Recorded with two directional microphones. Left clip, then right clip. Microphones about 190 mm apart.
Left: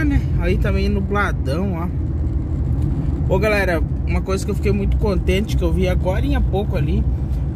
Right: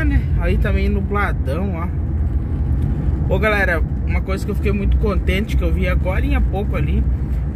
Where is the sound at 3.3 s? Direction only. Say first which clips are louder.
Even; 30° left (ahead or behind).